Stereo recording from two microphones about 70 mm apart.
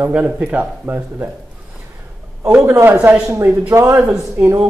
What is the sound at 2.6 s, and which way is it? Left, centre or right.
Speech, right.